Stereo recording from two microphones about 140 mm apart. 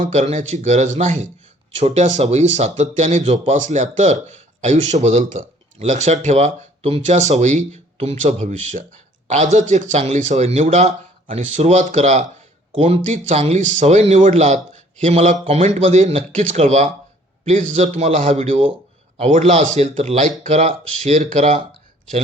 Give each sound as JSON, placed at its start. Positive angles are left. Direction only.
{"t": 0.0, "sound": "speech", "side_deg": -55}
{"t": 12.7, "sound": "speech", "side_deg": -45}